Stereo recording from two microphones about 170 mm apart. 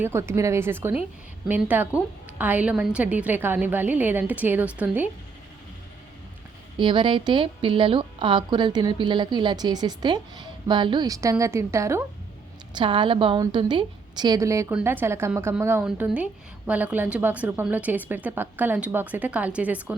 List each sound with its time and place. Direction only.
0.0 s a woman's voice: 15° right (ahead or behind)
6.7 s a woman's voice: 30° right (ahead or behind)
12.7 s a woman's voice: 30° right (ahead or behind); by 20.0 s 10° right (ahead or behind)